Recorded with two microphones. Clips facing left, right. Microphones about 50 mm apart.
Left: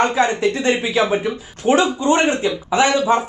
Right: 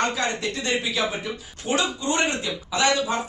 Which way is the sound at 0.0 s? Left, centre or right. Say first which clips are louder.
Left 8 dB; left.